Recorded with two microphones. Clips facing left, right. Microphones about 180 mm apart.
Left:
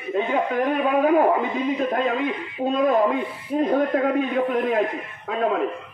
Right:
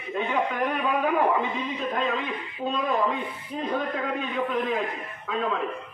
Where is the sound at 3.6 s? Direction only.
45° left (ahead or behind).